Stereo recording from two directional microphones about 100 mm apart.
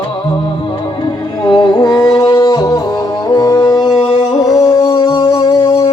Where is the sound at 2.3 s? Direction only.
35° left (ahead or behind).